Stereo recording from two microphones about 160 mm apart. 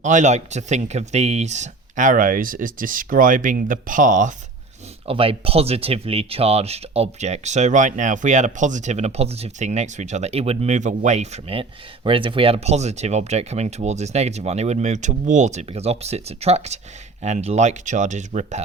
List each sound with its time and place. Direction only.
0.0 s speech: 50° right (ahead or behind)
5.0 s speech: 35° right (ahead or behind)